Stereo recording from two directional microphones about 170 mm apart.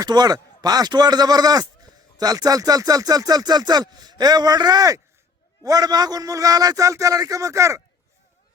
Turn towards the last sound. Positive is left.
turn(degrees=-15)  # may be behind; listen again after turning